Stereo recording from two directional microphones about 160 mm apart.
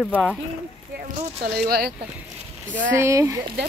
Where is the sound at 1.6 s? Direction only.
75° right (ahead or behind).